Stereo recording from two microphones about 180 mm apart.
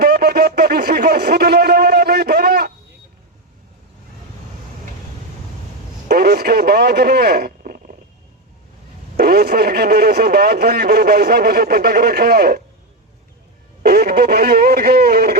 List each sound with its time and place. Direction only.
0.0 s a sound: 60° right (ahead or behind)
6.1 s radio: 60° right (ahead or behind)
9.1 s speech: 60° right (ahead or behind)
13.8 s speech: 60° right (ahead or behind)